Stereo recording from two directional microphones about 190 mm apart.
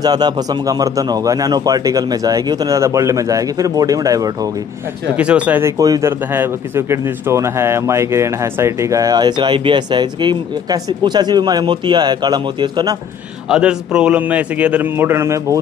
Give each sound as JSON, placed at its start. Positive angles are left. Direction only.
{"t": 0.0, "sound": "speech", "side_deg": -20}
{"t": 5.1, "sound": "a man's voice", "side_deg": -5}
{"t": 13.5, "sound": "a man's voice", "side_deg": -5}